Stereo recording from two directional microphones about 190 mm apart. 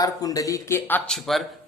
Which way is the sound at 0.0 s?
20° left (ahead or behind).